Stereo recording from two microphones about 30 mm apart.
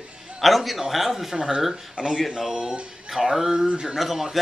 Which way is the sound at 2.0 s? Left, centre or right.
Right.